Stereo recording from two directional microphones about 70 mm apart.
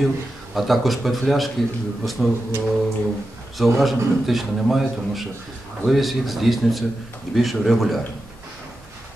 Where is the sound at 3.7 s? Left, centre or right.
Centre.